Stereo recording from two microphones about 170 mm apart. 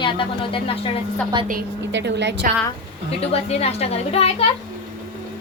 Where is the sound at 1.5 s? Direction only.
70° right (ahead or behind); by 2.4 s 90° right.